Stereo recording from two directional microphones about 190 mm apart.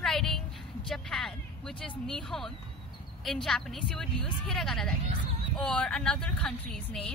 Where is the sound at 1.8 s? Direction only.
5° left (ahead or behind).